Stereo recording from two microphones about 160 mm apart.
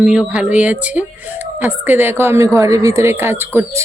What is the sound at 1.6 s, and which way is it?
Speech, 10° right (ahead or behind).